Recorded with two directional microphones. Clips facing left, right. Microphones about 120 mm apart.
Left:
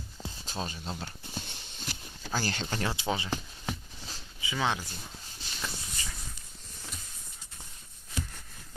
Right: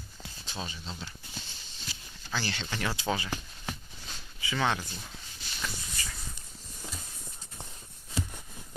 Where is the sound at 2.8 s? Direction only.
25° left (ahead or behind).